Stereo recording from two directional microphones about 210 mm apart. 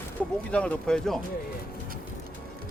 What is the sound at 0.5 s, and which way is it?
Speech, 5° left (ahead or behind).